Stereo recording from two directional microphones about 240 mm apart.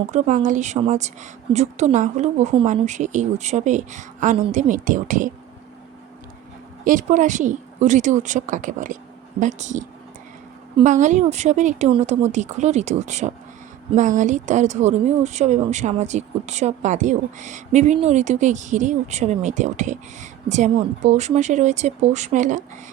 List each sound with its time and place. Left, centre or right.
0.1 s a woman's voice: right
6.8 s a woman's voice: right